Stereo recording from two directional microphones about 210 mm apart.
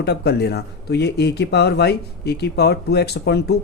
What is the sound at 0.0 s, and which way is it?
Speech, 50° left (ahead or behind).